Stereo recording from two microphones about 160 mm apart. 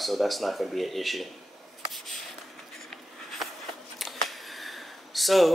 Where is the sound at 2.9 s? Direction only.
Centre (ahead or behind).